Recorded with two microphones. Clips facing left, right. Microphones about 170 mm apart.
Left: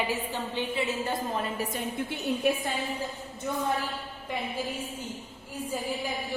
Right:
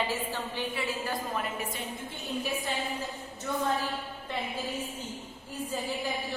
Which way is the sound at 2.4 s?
60° left (ahead or behind).